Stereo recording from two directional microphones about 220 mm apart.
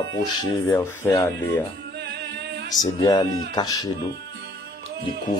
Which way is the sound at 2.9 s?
15° left (ahead or behind).